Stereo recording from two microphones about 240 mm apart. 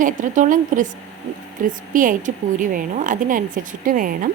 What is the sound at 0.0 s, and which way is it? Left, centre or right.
A woman's voice, right.